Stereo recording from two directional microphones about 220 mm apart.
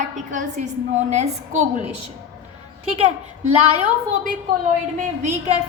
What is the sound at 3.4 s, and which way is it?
Speech, 80° right.